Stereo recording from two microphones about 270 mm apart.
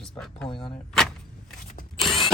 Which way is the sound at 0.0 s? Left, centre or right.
Centre.